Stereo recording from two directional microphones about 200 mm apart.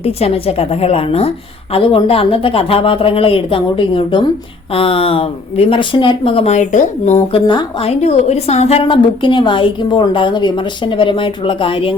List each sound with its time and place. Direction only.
0.0 s a woman's voice: 30° left (ahead or behind)
7.3 s a woman's voice: 25° left (ahead or behind)